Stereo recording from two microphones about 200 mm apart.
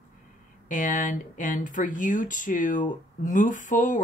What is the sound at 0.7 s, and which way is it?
Speech, 40° left (ahead or behind).